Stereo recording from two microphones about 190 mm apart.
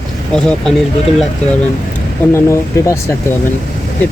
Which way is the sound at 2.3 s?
15° left (ahead or behind).